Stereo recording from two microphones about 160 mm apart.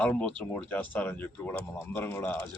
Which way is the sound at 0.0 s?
10° left (ahead or behind).